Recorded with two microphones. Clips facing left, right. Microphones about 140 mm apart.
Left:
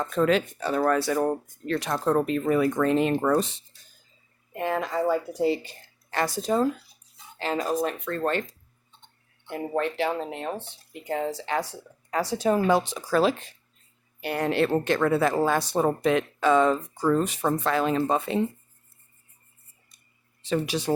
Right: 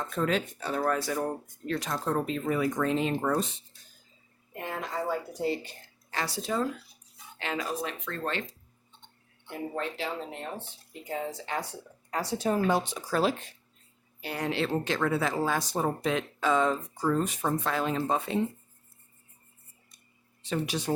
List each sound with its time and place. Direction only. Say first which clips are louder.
0.2 s speech: left 6 dB; 75° left (ahead or behind)
4.6 s speech: left 8 dB; 90° left
6.1 s speech: left 7 dB; 50° left (ahead or behind)
9.5 s speech: left 6 dB; 65° left (ahead or behind); by 13.3 s 90° left
14.2 s speech: left 6 dB; 60° left (ahead or behind); by 18.3 s 75° left (ahead or behind)
20.4 s speech: left 5 dB; 90° left